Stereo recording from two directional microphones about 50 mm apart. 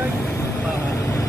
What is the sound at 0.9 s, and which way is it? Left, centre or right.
Vehicle, left.